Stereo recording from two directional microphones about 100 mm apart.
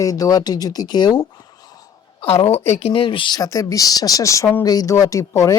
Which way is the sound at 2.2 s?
75° left (ahead or behind).